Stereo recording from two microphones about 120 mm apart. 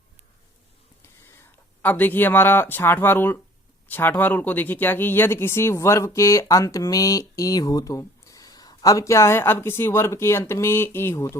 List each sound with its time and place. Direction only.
1.8 s speech: 15° left (ahead or behind)